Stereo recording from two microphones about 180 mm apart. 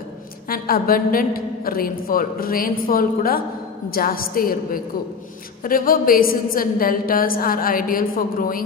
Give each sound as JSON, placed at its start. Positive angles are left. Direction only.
{"t": 0.5, "sound": "a woman's voice", "side_deg": 55}